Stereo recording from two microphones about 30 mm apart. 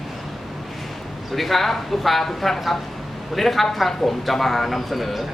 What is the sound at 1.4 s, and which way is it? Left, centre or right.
Speech, centre.